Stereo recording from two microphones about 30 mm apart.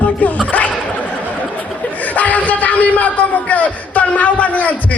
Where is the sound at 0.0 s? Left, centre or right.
Left.